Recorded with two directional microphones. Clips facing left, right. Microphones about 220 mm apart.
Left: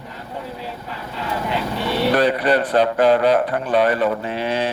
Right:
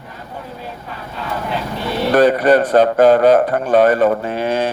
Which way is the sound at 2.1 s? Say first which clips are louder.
Right 8 dB; 45° right (ahead or behind).